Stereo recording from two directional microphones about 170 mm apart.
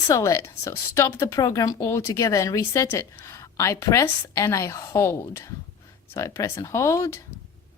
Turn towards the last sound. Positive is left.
turn(degrees=15)  # may be behind; listen again after turning